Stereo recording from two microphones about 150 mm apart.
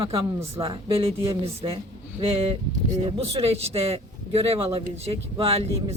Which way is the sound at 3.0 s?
40° right (ahead or behind).